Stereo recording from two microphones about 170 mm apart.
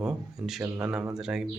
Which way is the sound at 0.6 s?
15° right (ahead or behind).